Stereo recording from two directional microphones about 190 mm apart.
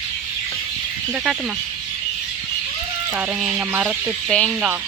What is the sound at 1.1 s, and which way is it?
Speech, 5° right (ahead or behind).